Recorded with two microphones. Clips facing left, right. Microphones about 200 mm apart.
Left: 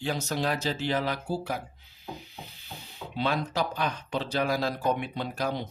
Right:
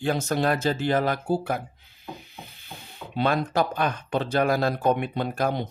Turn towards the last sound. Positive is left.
turn(degrees=-55)  # may be behind; listen again after turning